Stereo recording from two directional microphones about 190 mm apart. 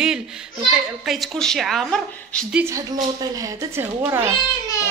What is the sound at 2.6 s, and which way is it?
Speech, 20° right (ahead or behind).